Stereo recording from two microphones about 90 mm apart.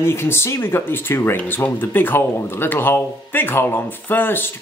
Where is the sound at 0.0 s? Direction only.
30° left (ahead or behind).